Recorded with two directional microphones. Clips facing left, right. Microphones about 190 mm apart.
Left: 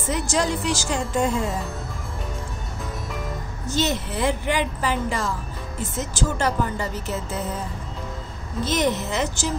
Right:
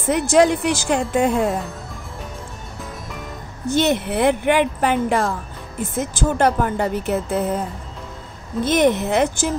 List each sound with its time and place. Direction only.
0.0 s a woman's voice: 60° right (ahead or behind)
3.6 s a woman's voice: 60° right (ahead or behind)
8.6 s a woman's voice: 55° right (ahead or behind)